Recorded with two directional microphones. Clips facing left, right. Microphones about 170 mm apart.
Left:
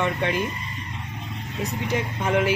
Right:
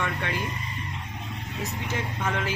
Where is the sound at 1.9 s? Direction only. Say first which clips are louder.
Left 7 dB; 15° left (ahead or behind).